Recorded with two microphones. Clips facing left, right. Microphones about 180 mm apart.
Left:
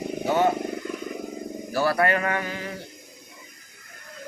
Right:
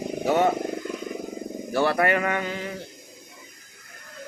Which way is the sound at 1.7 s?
20° right (ahead or behind).